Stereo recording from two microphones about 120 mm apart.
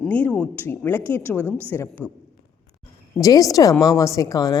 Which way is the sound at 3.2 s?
30° left (ahead or behind).